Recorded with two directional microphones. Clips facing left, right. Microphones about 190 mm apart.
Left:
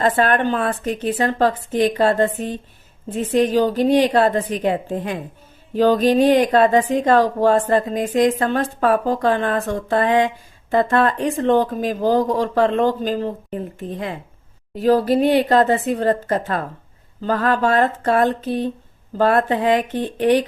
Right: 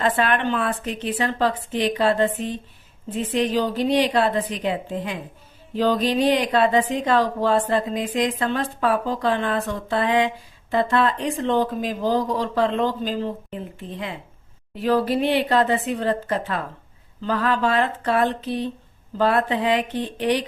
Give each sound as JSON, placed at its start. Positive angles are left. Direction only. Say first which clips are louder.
{"t": 0.0, "sound": "speech", "louder": "left 4 dB", "side_deg": 45}